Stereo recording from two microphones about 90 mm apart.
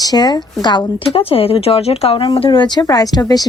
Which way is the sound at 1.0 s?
90° left.